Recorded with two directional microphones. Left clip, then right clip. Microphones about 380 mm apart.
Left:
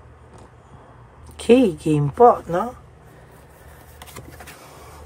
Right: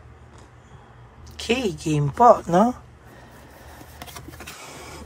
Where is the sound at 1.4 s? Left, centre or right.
Centre.